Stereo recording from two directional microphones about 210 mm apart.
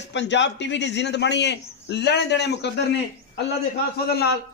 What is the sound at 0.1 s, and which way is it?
A man's voice, 60° left (ahead or behind).